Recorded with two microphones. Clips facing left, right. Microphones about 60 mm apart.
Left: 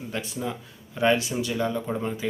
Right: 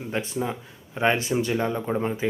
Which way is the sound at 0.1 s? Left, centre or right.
Right.